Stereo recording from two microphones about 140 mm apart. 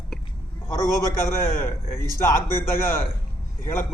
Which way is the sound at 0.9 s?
20° left (ahead or behind).